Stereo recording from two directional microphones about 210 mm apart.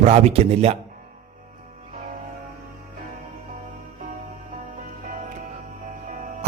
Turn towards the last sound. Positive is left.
turn(degrees=-35)  # may be behind; listen again after turning